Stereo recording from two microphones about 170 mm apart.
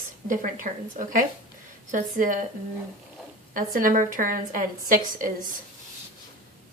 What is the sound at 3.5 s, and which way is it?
A woman's voice, 55° right (ahead or behind).